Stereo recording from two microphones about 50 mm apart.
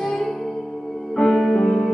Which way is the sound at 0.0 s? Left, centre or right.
Centre.